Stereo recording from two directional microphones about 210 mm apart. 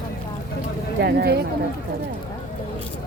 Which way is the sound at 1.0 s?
50° right (ahead or behind).